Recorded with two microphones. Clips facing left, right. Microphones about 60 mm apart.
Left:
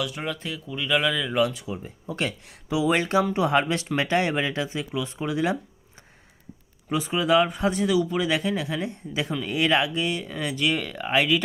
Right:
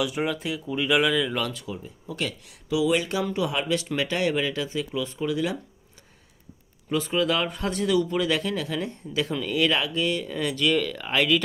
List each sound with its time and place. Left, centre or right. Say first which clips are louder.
0.0 s speech: right 3 dB; centre
1.3 s speech: left 5 dB; centre
1.8 s speech: left 3 dB; left
6.9 s speech: left 3 dB; centre